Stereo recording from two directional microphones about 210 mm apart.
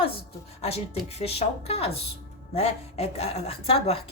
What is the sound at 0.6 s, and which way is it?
A woman's voice, 30° left (ahead or behind).